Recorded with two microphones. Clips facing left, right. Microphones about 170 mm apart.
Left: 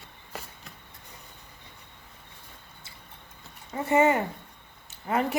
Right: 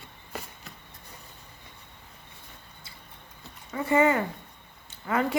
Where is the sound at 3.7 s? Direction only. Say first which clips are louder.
Even; 25° left (ahead or behind).